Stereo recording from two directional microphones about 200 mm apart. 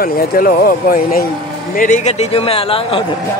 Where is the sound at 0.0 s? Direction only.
50° left (ahead or behind); by 3.1 s 25° left (ahead or behind).